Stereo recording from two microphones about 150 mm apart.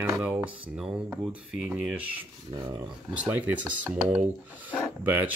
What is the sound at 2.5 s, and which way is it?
Speech, 25° right (ahead or behind).